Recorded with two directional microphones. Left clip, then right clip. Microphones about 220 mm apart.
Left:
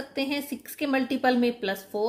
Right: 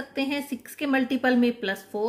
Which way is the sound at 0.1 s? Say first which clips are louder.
Right 1 dB; 5° right (ahead or behind).